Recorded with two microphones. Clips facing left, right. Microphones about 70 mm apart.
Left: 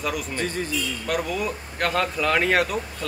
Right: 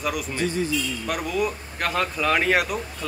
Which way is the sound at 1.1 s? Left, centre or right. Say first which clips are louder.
Even; centre.